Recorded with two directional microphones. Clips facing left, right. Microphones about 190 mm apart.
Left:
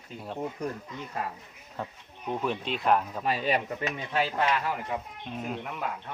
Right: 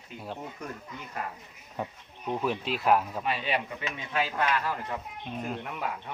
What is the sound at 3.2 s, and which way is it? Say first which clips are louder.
Speech: left 3 dB; 40° left (ahead or behind).